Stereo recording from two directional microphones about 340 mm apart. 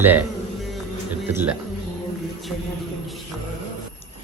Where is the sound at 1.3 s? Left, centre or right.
Centre.